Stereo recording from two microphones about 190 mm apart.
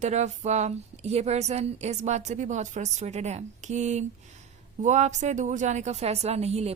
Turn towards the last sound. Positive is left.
turn(degrees=-35)  # may be behind; listen again after turning